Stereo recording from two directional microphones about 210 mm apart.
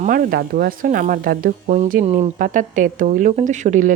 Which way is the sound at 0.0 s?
40° right (ahead or behind).